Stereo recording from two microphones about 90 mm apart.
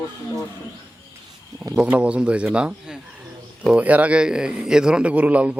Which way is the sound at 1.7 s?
10° right (ahead or behind).